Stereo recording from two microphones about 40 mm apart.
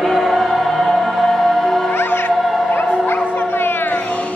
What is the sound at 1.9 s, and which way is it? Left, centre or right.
Music, left.